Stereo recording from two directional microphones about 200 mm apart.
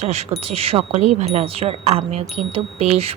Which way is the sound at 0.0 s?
30° right (ahead or behind).